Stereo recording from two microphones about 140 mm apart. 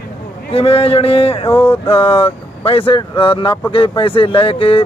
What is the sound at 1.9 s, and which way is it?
A man's voice, 40° left (ahead or behind).